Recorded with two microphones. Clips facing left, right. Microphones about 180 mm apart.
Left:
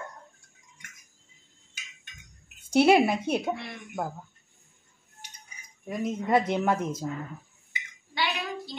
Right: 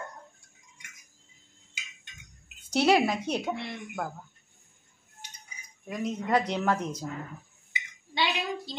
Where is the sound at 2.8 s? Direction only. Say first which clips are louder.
Left 3 dB; 10° left (ahead or behind).